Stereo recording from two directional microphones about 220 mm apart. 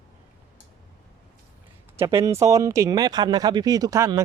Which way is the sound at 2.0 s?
15° right (ahead or behind).